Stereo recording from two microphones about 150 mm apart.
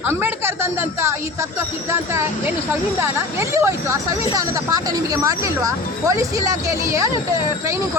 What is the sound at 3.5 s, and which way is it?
Speech, 20° right (ahead or behind).